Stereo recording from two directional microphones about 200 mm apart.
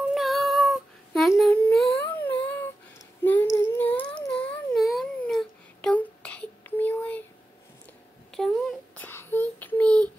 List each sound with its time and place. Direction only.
0.1 s child singing: centre (ahead or behind)
2.0 s humming: 10° left (ahead or behind)
3.2 s child singing: 10° left (ahead or behind)
3.5 s a sound: 10° left (ahead or behind)
8.3 s child singing: 5° left (ahead or behind)